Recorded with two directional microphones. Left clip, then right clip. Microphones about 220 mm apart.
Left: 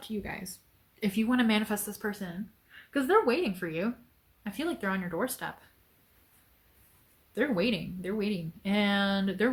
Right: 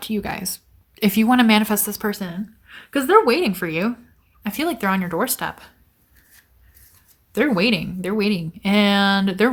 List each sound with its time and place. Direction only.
0.0 s speech: 45° right (ahead or behind)
7.3 s speech: 50° right (ahead or behind)